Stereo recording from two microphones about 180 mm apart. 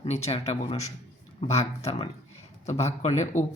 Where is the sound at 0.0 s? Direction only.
35° left (ahead or behind).